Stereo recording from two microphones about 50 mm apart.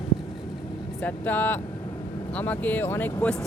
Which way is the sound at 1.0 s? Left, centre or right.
Left.